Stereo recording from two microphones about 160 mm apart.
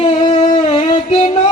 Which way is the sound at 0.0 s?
30° left (ahead or behind).